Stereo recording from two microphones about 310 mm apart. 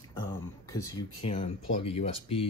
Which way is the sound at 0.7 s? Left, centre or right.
Centre.